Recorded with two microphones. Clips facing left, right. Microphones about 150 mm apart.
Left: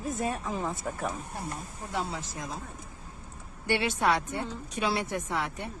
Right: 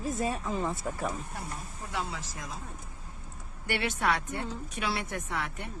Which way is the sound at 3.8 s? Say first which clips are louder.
Left 2 dB; 25° left (ahead or behind).